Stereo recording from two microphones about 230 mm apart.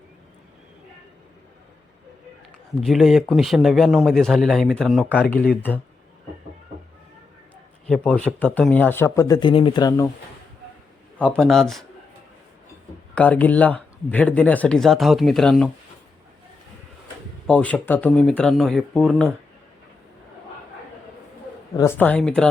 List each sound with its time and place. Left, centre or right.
2.8 s a man's voice: centre
7.9 s speech: centre
11.2 s a man's voice: centre
13.1 s a man's voice: centre
17.4 s a man's voice: centre
21.8 s speech: centre